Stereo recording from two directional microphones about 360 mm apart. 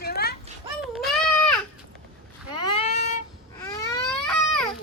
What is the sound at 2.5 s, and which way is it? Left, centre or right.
Vehicle, centre.